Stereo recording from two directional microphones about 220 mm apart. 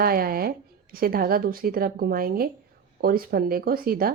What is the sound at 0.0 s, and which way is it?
Speech, 45° right (ahead or behind).